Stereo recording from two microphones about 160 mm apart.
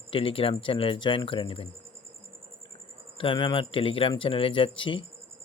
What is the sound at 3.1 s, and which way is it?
Speech, 30° left (ahead or behind).